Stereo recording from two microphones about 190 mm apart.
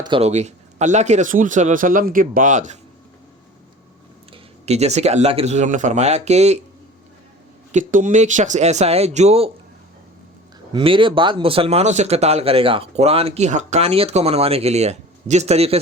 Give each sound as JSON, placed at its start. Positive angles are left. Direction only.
{"t": 0.0, "sound": "speech", "side_deg": -30}
{"t": 4.3, "sound": "speech", "side_deg": -35}
{"t": 7.7, "sound": "speech", "side_deg": -40}
{"t": 10.7, "sound": "speech", "side_deg": -25}